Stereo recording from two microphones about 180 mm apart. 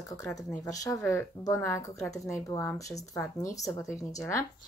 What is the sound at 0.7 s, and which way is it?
Speech, 20° left (ahead or behind).